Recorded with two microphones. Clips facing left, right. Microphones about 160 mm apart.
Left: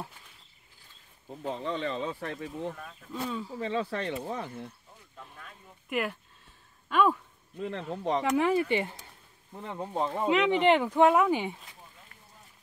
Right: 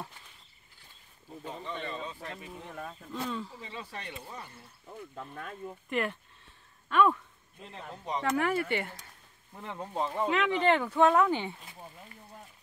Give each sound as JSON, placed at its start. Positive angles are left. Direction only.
{"t": 1.4, "sound": "speech", "side_deg": 90}
{"t": 3.1, "sound": "speech", "side_deg": 5}
{"t": 3.5, "sound": "speech", "side_deg": 80}
{"t": 4.9, "sound": "speech", "side_deg": -60}
{"t": 5.9, "sound": "speech", "side_deg": 5}
{"t": 7.6, "sound": "speech", "side_deg": 85}
{"t": 8.2, "sound": "speech", "side_deg": 15}